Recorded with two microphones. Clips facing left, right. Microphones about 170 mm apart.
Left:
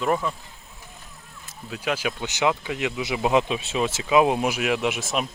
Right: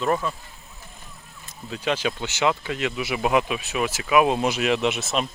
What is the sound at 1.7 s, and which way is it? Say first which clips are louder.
Speech: right 2 dB; 5° left (ahead or behind).